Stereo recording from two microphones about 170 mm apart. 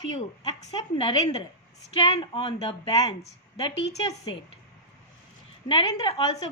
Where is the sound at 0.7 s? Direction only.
30° left (ahead or behind).